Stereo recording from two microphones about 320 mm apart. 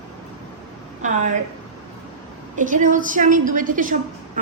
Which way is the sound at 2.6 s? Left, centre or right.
Right.